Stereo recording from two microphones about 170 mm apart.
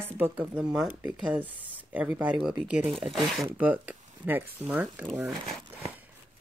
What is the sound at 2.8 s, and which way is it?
Speech, 30° right (ahead or behind).